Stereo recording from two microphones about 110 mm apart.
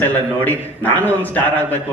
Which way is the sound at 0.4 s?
15° left (ahead or behind).